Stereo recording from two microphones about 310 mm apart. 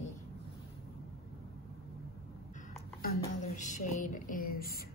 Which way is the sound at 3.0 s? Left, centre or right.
Left.